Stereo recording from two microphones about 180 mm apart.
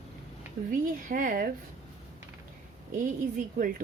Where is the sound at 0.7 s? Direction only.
50° right (ahead or behind).